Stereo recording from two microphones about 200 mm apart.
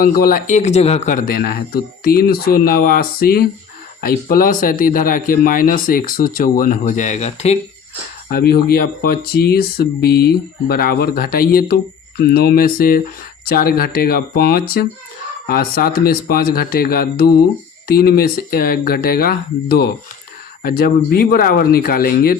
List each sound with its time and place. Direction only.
0.0 s speech: 45° left (ahead or behind)
8.3 s speech: 50° left (ahead or behind)